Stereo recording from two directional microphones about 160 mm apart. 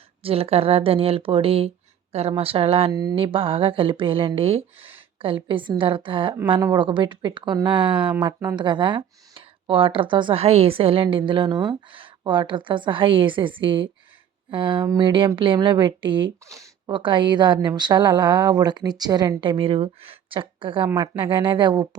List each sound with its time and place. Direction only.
0.2 s speech: 35° right (ahead or behind)
2.9 s a woman's voice: 25° right (ahead or behind)
3.2 s a woman's voice: 35° right (ahead or behind)